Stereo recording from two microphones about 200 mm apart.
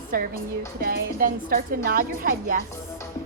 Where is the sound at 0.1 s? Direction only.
45° right (ahead or behind).